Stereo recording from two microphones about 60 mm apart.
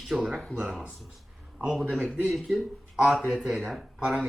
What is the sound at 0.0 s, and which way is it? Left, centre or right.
Speech, centre.